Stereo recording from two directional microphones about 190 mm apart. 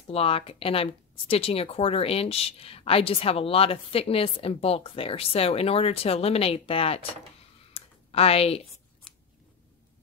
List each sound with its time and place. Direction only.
0.1 s speech: 30° left (ahead or behind)
7.7 s a sound: 30° left (ahead or behind)
9.1 s scissors: 5° left (ahead or behind)